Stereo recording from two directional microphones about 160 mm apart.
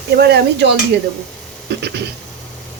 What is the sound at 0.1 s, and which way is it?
Speech, 90° right.